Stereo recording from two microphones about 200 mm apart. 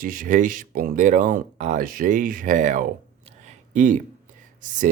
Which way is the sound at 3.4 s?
40° right (ahead or behind).